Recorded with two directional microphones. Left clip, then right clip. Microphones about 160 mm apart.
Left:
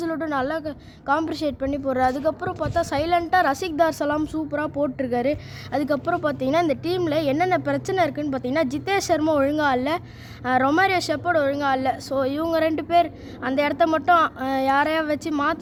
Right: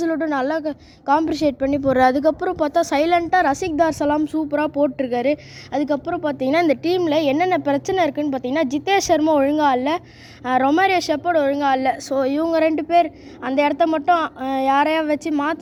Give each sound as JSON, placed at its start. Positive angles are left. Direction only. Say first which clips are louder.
{"t": 0.0, "sound": "a woman's voice", "louder": "right 4 dB", "side_deg": -35}
{"t": 6.4, "sound": "a woman's voice", "louder": "right 8 dB", "side_deg": -35}